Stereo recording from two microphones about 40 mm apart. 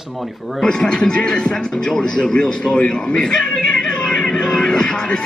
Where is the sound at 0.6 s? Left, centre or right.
Left.